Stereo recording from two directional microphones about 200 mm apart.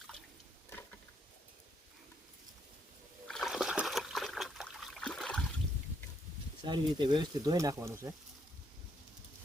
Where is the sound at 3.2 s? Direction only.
Centre (ahead or behind).